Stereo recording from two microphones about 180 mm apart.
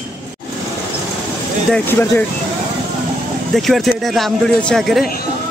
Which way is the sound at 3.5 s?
Centre (ahead or behind).